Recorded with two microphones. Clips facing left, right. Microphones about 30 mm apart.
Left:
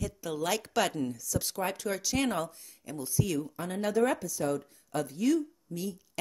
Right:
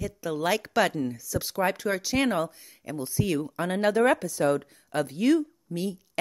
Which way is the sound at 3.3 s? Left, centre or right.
Right.